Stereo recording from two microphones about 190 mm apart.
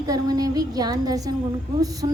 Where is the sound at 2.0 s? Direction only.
30° right (ahead or behind).